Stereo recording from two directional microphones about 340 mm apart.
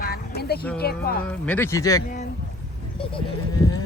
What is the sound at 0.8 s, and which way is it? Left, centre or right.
Speech, left.